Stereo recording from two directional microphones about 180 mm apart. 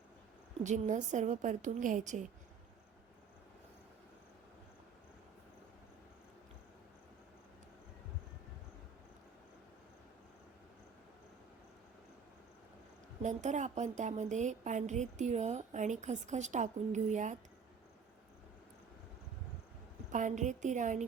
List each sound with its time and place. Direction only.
0.6 s a woman's voice: 45° right (ahead or behind)
13.2 s a woman's voice: 40° right (ahead or behind)
20.1 s a woman's voice: 45° right (ahead or behind)